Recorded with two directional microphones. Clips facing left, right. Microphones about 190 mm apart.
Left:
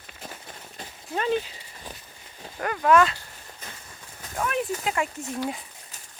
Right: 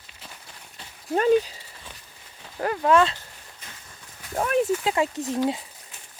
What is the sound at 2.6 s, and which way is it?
Speech, 30° right (ahead or behind).